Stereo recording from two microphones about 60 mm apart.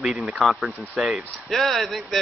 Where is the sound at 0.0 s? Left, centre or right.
Centre.